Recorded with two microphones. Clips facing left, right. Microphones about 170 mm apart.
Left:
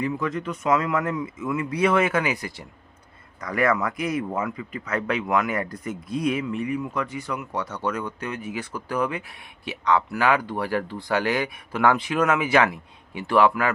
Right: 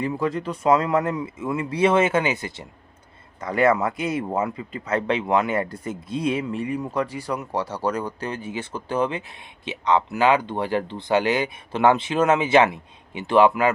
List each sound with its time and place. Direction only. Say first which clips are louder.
0.0 s speech: right 2 dB; 30° right (ahead or behind)